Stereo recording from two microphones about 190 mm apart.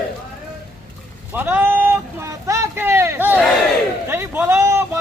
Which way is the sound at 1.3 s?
10° right (ahead or behind).